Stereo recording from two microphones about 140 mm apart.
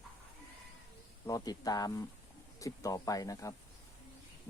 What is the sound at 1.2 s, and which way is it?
Speech, 25° left (ahead or behind).